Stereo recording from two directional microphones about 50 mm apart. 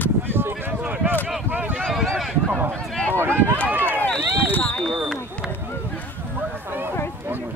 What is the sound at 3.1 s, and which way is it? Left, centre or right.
Speech, right.